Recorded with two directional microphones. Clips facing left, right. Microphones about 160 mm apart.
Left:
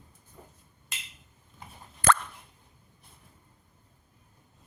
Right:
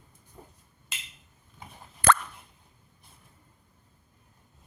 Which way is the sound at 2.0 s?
60° right (ahead or behind).